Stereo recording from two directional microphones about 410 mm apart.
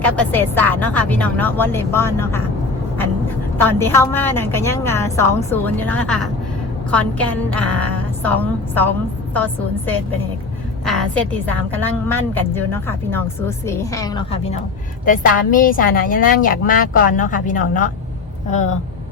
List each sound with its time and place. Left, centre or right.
0.0 s a woman's voice: centre
3.7 s a woman's voice: centre